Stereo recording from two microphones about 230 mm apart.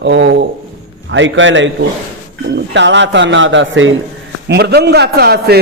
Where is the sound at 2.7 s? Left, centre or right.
Right.